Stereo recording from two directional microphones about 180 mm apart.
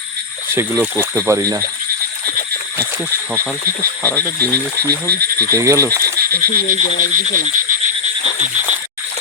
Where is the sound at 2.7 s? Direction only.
15° right (ahead or behind).